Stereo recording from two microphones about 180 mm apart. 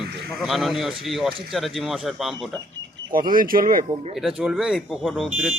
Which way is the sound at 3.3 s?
50° right (ahead or behind).